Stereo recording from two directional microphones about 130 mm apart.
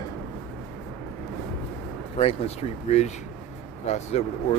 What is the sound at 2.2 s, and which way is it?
Speech, 50° left (ahead or behind).